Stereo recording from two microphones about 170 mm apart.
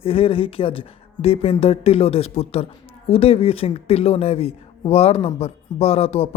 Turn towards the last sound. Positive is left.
turn(degrees=35)  # may be behind; listen again after turning